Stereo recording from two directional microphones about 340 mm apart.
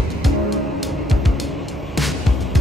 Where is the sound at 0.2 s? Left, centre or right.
Centre.